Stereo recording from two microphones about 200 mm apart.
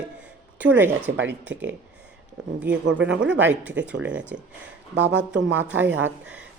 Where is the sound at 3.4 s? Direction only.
10° right (ahead or behind).